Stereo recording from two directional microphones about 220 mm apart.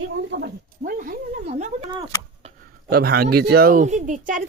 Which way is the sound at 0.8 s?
35° right (ahead or behind).